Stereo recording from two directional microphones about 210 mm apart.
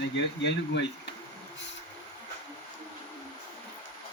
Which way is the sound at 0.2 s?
55° left (ahead or behind).